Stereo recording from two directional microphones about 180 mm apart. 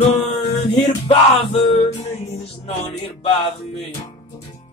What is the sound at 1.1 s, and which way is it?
Music, 30° left (ahead or behind).